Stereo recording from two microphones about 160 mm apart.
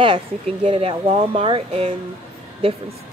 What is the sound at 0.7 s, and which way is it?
Speech, 40° right (ahead or behind).